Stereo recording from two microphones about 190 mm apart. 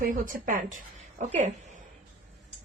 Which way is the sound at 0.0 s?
45° right (ahead or behind).